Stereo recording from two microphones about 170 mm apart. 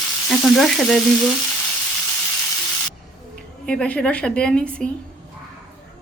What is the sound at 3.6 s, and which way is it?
A woman's voice, 5° left (ahead or behind).